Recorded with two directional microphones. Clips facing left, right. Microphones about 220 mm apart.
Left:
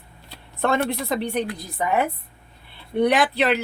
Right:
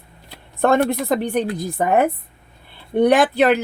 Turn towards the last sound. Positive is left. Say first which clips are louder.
# right 5 dB
turn(degrees=-45)  # may be behind; listen again after turning